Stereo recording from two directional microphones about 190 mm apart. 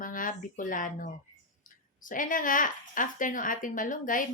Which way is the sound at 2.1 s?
45° left (ahead or behind).